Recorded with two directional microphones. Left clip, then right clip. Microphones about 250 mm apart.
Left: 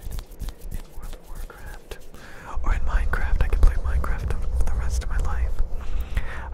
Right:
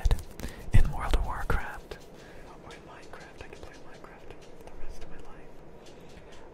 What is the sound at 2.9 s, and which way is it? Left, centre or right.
Whispering, left.